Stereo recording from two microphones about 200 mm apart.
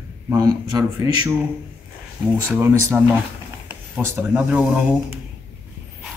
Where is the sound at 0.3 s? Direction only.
20° right (ahead or behind).